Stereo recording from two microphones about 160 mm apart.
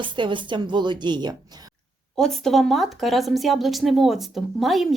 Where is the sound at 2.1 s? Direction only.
5° left (ahead or behind).